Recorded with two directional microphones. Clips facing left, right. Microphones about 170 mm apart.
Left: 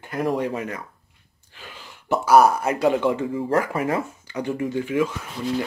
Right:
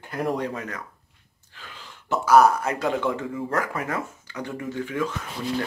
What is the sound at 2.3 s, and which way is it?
Speech, 10° left (ahead or behind).